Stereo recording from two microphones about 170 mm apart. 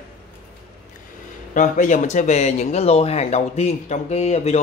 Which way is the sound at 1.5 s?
50° left (ahead or behind).